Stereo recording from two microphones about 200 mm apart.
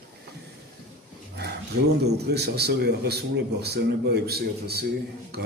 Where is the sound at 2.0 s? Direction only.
55° right (ahead or behind).